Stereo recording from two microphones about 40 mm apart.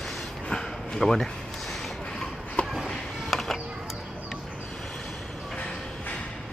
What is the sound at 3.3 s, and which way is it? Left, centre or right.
Music, centre.